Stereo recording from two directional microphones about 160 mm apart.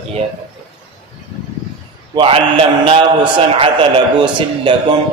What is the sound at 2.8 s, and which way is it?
A man's voice, 35° right (ahead or behind).